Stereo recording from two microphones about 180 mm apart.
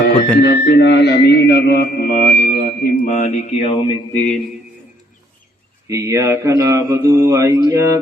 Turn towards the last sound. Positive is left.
turn(degrees=-15)  # may be behind; listen again after turning